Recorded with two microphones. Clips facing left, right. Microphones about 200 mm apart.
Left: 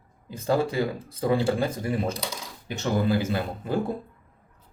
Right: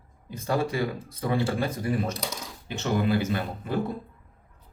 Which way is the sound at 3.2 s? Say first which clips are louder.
Left 1 dB; 30° left (ahead or behind).